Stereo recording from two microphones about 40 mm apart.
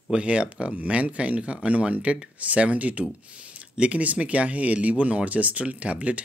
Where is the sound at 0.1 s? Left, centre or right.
Right.